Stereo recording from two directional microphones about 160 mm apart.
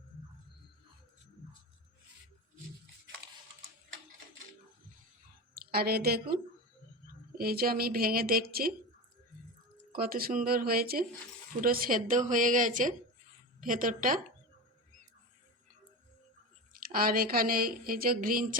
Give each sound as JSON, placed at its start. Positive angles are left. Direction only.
{"t": 5.5, "sound": "a woman's voice", "side_deg": -75}
{"t": 9.9, "sound": "speech", "side_deg": -65}
{"t": 16.7, "sound": "a woman's voice", "side_deg": -65}